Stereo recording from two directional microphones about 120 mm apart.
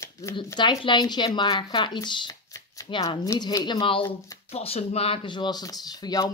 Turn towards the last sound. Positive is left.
turn(degrees=35)  # may be behind; listen again after turning